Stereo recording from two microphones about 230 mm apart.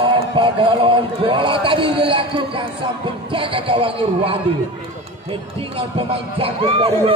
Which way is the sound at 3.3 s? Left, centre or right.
Right.